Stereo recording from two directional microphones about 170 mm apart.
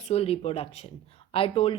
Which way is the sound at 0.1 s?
35° left (ahead or behind).